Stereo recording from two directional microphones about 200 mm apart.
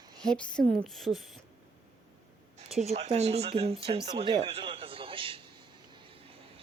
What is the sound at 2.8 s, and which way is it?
Speech, 35° right (ahead or behind).